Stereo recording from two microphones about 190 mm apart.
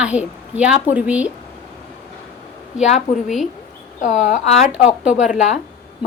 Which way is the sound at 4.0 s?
40° left (ahead or behind).